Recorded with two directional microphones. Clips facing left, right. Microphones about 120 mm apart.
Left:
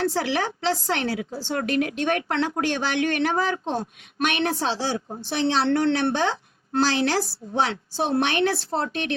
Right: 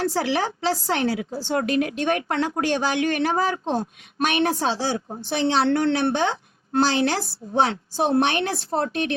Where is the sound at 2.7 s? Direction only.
40° right (ahead or behind).